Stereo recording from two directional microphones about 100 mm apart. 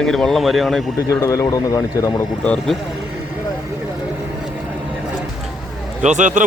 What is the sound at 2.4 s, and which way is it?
Speech, 10° left (ahead or behind).